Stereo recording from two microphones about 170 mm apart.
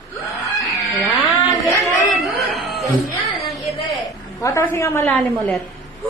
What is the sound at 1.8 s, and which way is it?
Speech, 15° left (ahead or behind).